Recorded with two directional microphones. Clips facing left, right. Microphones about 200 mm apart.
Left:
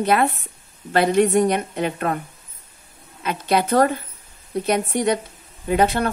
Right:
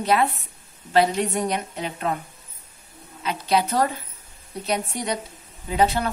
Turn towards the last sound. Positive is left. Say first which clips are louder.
# left 3 dB
turn(degrees=60)  # may be behind; listen again after turning